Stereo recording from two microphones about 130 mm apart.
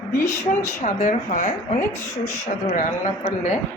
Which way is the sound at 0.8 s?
70° left (ahead or behind).